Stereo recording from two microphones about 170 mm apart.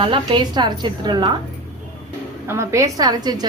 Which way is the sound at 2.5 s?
15° right (ahead or behind).